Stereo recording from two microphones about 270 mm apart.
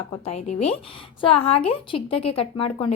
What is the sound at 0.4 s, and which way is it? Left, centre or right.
A woman's voice, left.